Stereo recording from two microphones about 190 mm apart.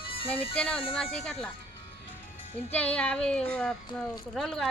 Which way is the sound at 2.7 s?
5° left (ahead or behind).